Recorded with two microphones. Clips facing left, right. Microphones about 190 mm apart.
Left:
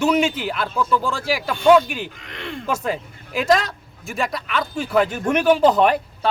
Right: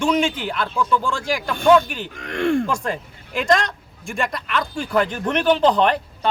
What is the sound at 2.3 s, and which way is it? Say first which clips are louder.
Speech: right 18 dB; 50° right (ahead or behind).